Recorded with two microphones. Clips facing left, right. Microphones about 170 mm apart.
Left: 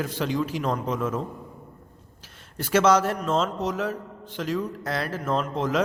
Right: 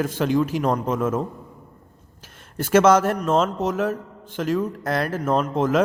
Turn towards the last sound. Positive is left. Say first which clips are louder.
# right 5 dB
turn(degrees=-50)  # may be behind; listen again after turning